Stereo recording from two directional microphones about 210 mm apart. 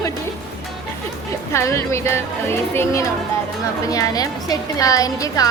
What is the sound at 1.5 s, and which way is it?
Speech, 15° left (ahead or behind).